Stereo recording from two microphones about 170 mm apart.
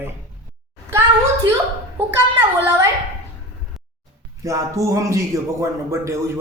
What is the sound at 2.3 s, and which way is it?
Speech, 15° right (ahead or behind).